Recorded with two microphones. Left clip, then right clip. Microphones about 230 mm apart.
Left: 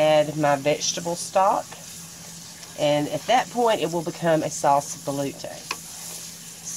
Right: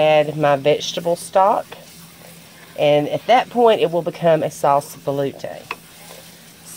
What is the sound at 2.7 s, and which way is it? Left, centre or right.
Speech, right.